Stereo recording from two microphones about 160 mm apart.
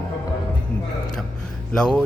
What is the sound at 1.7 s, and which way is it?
Speech, 5° left (ahead or behind).